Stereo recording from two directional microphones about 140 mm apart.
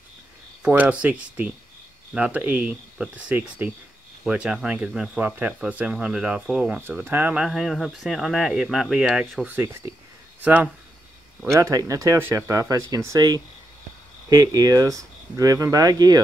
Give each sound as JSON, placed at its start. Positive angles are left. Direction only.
{"t": 0.6, "sound": "speech", "side_deg": -10}
{"t": 11.5, "sound": "speech", "side_deg": -20}